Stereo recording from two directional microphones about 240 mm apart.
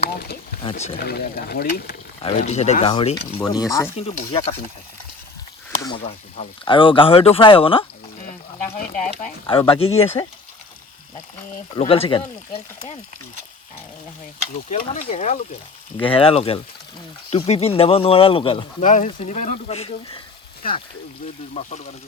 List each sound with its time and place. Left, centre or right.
0.6 s speech: left
1.0 s speech: left
2.2 s speech: left
5.8 s speech: left
9.2 s speech: left
11.7 s speech: left
14.7 s speech: left